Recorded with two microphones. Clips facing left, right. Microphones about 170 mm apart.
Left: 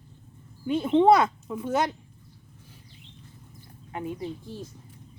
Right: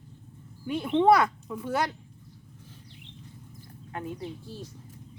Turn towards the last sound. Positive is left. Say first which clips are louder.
# left 3 dB
turn(degrees=15)  # may be behind; listen again after turning